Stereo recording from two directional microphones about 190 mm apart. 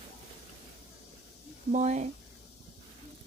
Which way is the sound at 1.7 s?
35° right (ahead or behind).